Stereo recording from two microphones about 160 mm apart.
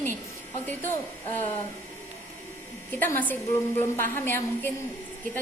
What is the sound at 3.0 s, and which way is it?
A woman's voice, 10° left (ahead or behind).